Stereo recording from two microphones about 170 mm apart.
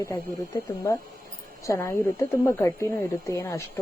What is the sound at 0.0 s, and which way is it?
A woman's voice, 15° left (ahead or behind).